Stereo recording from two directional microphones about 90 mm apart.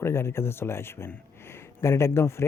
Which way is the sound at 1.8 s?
30° left (ahead or behind).